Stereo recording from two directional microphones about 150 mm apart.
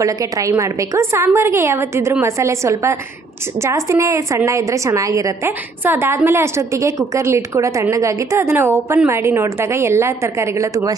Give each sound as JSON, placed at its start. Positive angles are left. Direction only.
{"t": 0.0, "sound": "a woman's voice", "side_deg": -20}